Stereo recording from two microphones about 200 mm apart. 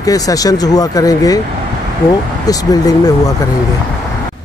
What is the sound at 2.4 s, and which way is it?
Speech, 20° left (ahead or behind).